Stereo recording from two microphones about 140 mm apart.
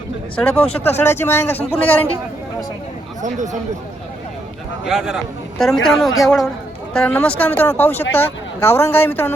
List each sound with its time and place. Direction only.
0.3 s speech: 5° left (ahead or behind)
3.2 s speech: 60° right (ahead or behind)
4.9 s speech: 5° right (ahead or behind); by 9.3 s 15° left (ahead or behind)